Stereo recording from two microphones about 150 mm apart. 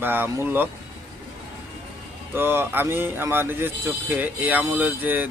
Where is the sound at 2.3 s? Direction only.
15° right (ahead or behind).